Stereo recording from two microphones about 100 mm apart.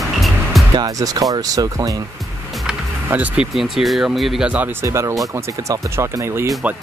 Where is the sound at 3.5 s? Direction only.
Centre (ahead or behind).